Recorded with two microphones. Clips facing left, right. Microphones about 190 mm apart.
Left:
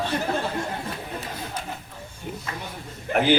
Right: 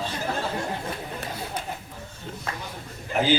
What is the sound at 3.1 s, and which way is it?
Speech, 60° left (ahead or behind).